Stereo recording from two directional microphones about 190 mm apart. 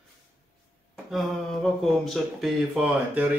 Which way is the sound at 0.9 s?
Centre (ahead or behind).